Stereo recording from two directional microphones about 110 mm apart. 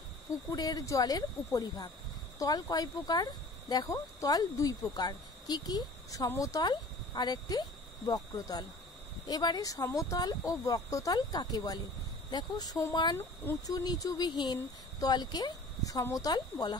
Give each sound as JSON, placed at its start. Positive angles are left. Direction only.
{"t": 0.5, "sound": "speech", "side_deg": 35}